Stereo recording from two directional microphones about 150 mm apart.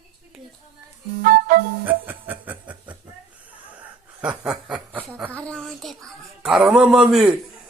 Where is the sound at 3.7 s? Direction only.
10° right (ahead or behind).